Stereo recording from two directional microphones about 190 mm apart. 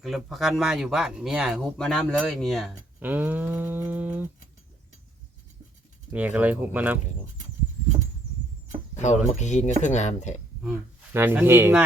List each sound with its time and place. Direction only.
0.0 s speech: centre (ahead or behind)
6.1 s speech: 5° right (ahead or behind)
9.0 s speech: 40° left (ahead or behind)
10.6 s speech: 10° right (ahead or behind)